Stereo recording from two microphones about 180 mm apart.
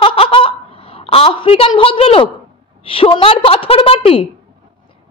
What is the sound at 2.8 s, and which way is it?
A woman's voice, 30° left (ahead or behind).